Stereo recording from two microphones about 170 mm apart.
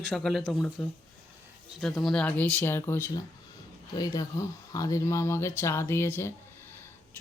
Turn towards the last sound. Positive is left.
turn(degrees=15)  # may be behind; listen again after turning